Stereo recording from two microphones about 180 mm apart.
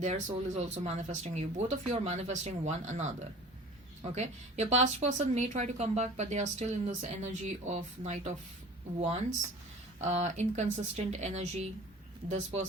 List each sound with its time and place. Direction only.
0.0 s speech: 40° right (ahead or behind)